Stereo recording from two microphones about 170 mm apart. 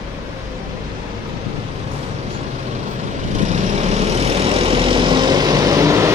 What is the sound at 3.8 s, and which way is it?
Vehicle, 40° right (ahead or behind).